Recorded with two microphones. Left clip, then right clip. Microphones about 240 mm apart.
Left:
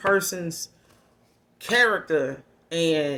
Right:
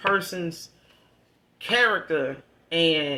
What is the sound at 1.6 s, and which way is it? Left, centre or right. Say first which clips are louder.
Speech: left 1 dB; left.